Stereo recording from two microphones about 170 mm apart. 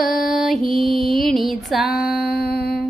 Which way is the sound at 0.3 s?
Centre (ahead or behind).